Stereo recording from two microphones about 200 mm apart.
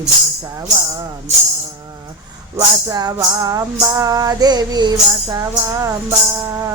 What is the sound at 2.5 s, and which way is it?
Music, 20° right (ahead or behind).